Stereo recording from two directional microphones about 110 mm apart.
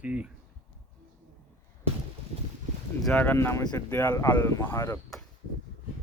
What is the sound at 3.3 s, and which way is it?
Speech, 25° left (ahead or behind).